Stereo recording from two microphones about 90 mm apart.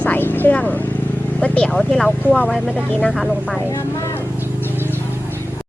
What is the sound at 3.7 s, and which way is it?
Speech, 35° left (ahead or behind).